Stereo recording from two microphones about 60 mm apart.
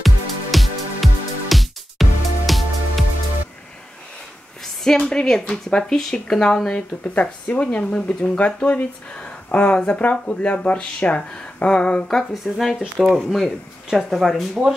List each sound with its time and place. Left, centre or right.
0.0 s music: centre
4.8 s speech: centre